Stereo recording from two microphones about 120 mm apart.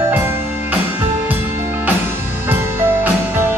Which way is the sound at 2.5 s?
15° right (ahead or behind).